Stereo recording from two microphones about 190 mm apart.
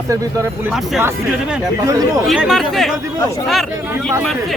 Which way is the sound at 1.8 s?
20° right (ahead or behind).